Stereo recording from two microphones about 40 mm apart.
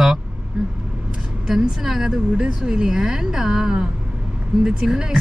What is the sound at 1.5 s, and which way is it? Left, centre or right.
Speech, centre.